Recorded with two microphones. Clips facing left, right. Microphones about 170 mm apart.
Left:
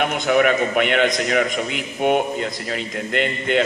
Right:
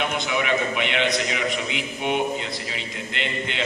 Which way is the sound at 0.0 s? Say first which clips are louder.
Left 8 dB; 50° left (ahead or behind).